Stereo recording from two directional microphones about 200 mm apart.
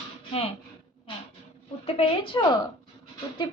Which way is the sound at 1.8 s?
30° left (ahead or behind).